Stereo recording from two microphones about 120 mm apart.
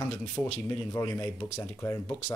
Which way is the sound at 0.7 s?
25° left (ahead or behind).